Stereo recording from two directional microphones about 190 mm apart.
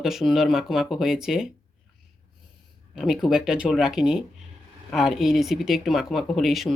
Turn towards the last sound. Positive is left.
turn(degrees=0)  # may be behind; listen again after turning